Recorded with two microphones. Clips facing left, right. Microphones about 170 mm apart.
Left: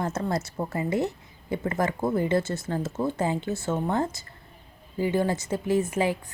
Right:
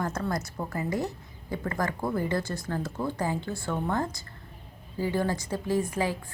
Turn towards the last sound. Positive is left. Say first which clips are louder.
# left 3 dB
turn(degrees=20)  # may be behind; listen again after turning